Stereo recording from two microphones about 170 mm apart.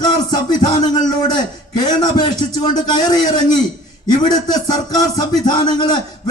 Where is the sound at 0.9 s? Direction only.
25° left (ahead or behind).